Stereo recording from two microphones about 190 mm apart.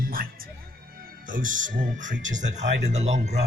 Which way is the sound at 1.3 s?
45° right (ahead or behind).